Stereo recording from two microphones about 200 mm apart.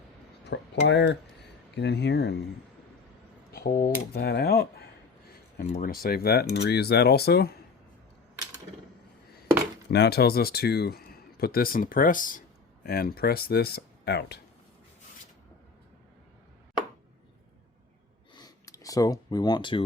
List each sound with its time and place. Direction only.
0.4 s speech: 60° left (ahead or behind)
3.5 s speech: 45° left (ahead or behind)
9.9 s speech: 55° left (ahead or behind)
18.3 s a sound: 20° left (ahead or behind)